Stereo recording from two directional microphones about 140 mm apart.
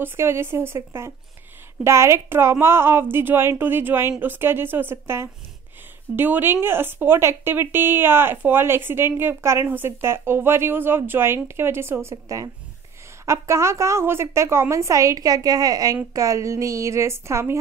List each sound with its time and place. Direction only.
0.0 s a woman's voice: 15° right (ahead or behind)